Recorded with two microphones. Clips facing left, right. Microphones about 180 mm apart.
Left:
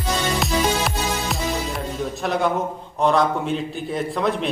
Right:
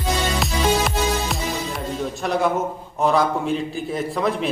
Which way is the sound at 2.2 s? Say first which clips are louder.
Right 1 dB; centre (ahead or behind).